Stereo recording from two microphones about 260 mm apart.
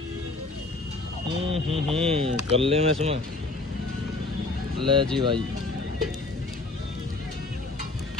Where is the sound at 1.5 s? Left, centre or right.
Right.